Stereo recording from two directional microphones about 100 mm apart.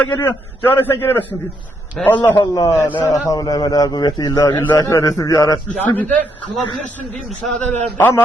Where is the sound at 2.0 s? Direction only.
5° left (ahead or behind).